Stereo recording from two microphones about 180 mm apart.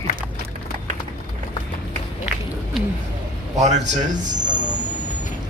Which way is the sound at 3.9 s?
45° right (ahead or behind).